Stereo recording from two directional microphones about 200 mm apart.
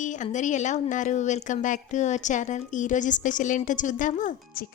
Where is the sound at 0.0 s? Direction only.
35° left (ahead or behind).